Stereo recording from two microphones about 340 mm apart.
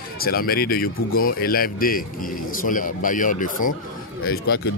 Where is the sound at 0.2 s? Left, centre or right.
Left.